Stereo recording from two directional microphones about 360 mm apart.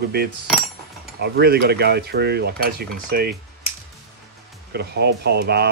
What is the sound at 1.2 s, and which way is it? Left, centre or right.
Speech, right.